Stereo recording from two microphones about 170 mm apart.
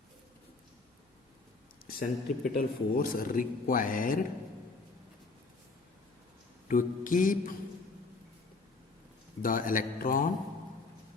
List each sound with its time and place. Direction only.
1.9 s a man's voice: 55° left (ahead or behind)
6.7 s a man's voice: 50° left (ahead or behind)
9.4 s a man's voice: 55° left (ahead or behind)